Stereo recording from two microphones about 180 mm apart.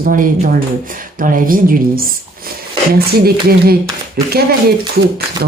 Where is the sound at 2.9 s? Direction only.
60° right (ahead or behind).